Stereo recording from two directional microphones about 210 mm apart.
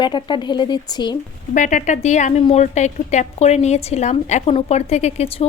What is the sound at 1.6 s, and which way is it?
A woman's voice, 35° left (ahead or behind).